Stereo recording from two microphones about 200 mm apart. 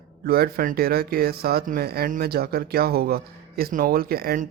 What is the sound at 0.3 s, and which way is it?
Speech, 50° right (ahead or behind).